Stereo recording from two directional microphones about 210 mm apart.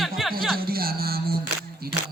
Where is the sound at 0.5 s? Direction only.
45° right (ahead or behind).